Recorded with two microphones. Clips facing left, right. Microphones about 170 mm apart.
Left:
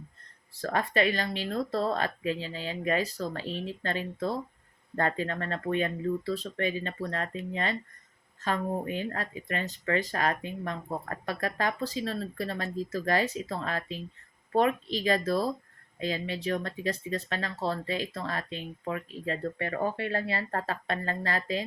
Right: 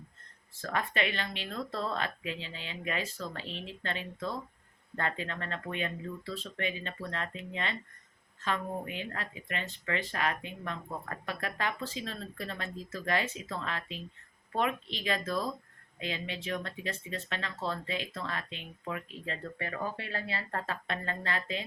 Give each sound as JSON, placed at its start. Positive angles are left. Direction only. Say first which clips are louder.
{"t": 0.5, "sound": "speech", "louder": "left 5 dB", "side_deg": 35}